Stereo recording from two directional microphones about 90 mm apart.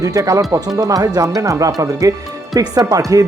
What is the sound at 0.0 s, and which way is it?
Speech, 40° right (ahead or behind).